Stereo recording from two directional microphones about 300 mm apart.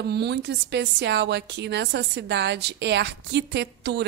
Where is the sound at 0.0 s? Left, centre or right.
Right.